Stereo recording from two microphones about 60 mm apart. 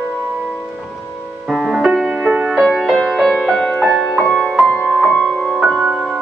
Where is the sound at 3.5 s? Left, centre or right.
Left.